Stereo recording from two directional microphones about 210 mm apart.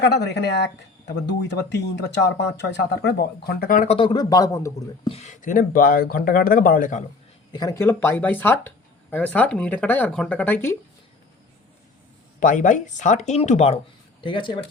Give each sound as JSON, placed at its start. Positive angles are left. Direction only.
{"t": 0.0, "sound": "speech", "side_deg": 55}
{"t": 3.9, "sound": "speech", "side_deg": 20}
{"t": 5.0, "sound": "speech", "side_deg": 30}
{"t": 7.5, "sound": "speech", "side_deg": 15}
{"t": 12.4, "sound": "speech", "side_deg": 40}